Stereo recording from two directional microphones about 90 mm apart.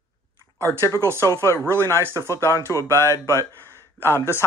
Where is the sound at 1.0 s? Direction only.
30° right (ahead or behind).